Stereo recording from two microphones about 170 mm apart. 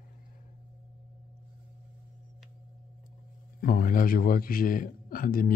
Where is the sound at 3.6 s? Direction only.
55° left (ahead or behind).